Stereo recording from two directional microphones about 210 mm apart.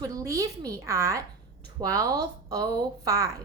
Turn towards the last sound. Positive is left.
turn(degrees=-15)  # may be behind; listen again after turning